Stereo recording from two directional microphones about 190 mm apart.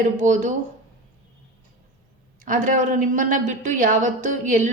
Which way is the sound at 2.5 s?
40° right (ahead or behind).